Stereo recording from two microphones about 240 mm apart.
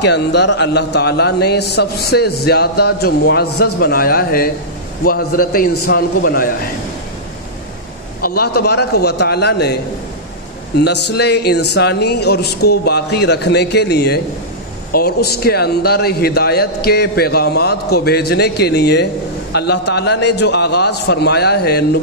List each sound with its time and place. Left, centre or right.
0.0 s a man's voice: left
8.2 s a man's voice: left
10.8 s a man's voice: left